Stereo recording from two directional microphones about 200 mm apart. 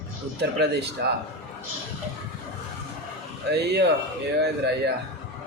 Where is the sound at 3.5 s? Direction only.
55° right (ahead or behind).